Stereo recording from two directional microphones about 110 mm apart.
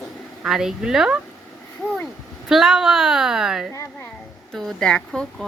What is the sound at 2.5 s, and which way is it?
Speech, 5° right (ahead or behind).